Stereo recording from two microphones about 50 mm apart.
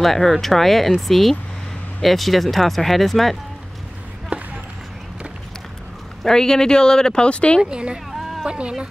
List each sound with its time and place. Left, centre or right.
0.0 s speech: centre
6.2 s speech: centre
7.7 s speech: centre
8.1 s a sound: centre
8.5 s speech: right